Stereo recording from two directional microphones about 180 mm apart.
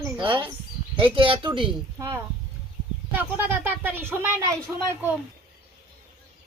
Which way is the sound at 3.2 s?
10° right (ahead or behind).